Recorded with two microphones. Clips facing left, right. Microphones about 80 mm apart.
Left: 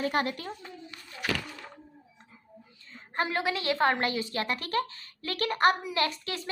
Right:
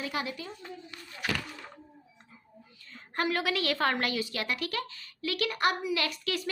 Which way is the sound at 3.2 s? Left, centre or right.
Left.